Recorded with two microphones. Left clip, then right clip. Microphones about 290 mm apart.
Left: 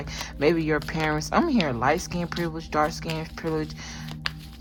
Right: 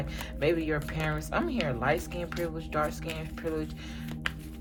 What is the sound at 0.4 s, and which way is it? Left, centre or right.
Speech, left.